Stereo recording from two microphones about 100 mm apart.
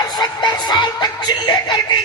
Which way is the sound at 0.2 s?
45° left (ahead or behind).